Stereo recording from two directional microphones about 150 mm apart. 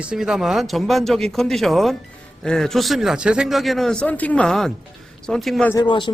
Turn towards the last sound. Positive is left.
turn(degrees=30)  # may be behind; listen again after turning